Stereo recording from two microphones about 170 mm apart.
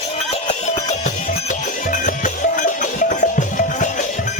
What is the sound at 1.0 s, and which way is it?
Music, 50° left (ahead or behind).